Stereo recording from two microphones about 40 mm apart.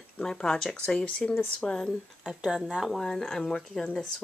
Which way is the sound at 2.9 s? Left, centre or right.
Centre.